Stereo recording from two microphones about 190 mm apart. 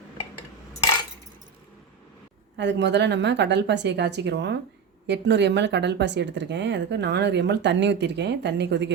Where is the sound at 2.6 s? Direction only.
65° right (ahead or behind).